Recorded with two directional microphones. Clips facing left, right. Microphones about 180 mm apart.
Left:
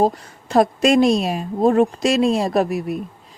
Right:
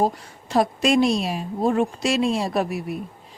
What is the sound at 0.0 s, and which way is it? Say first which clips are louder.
A woman's voice: left 4 dB; 45° left (ahead or behind).